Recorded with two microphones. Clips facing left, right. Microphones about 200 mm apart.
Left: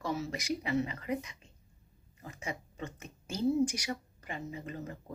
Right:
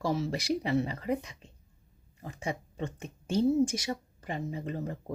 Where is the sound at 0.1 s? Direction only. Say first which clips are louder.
Right 3 dB; 30° right (ahead or behind).